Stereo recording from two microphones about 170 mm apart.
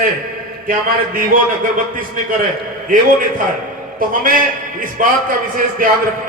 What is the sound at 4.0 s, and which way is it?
A man's voice, 55° right (ahead or behind).